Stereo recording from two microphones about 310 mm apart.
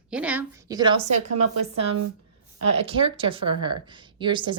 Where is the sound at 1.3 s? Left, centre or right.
Right.